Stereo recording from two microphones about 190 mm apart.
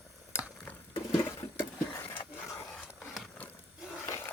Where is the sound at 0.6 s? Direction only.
10° left (ahead or behind).